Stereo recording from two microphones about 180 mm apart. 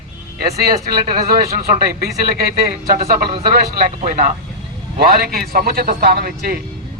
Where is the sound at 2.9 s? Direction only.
55° right (ahead or behind).